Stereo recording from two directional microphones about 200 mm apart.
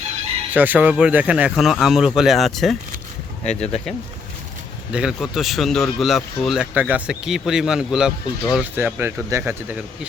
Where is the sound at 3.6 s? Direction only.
30° left (ahead or behind).